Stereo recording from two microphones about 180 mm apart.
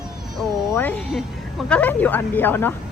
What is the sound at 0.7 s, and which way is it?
Speech, 10° left (ahead or behind).